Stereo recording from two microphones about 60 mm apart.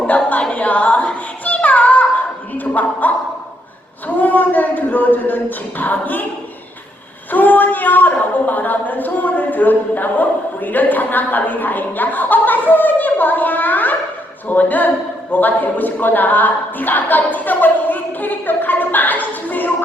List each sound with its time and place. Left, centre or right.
0.5 s music: left
2.7 s a sound: left
4.2 s a woman's voice: left
7.3 s a woman's voice: left